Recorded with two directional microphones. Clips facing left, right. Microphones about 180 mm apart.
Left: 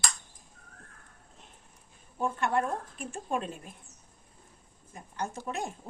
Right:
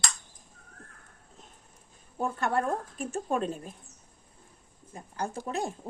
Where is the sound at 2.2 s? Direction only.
40° right (ahead or behind).